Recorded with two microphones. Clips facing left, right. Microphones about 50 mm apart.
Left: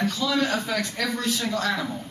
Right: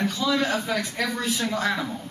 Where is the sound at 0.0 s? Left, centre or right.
Centre.